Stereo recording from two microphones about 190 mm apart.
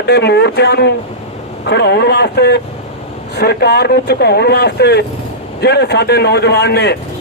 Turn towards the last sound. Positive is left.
turn(degrees=60)  # may be behind; listen again after turning